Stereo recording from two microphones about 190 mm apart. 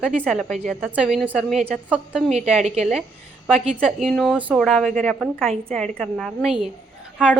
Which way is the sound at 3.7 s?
Centre (ahead or behind).